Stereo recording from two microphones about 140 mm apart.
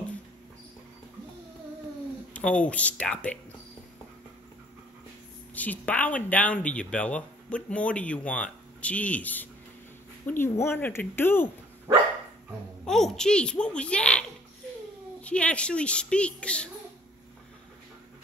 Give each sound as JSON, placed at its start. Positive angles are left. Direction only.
{"t": 2.3, "sound": "speech", "side_deg": 10}
{"t": 5.5, "sound": "speech", "side_deg": 10}
{"t": 12.8, "sound": "speech", "side_deg": 5}
{"t": 15.2, "sound": "speech", "side_deg": 10}